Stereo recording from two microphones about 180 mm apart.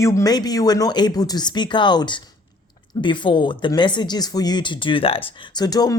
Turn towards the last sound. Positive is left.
turn(degrees=20)  # may be behind; listen again after turning